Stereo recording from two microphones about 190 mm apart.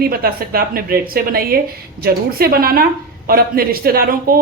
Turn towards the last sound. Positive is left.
turn(degrees=-50)  # may be behind; listen again after turning